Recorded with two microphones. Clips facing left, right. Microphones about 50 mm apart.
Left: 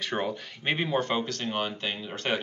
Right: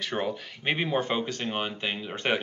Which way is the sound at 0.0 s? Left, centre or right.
Centre.